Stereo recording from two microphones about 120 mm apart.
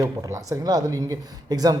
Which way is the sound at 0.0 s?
25° right (ahead or behind).